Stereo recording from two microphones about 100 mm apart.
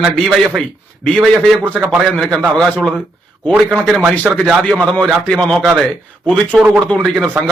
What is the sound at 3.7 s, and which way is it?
Speech, 5° right (ahead or behind).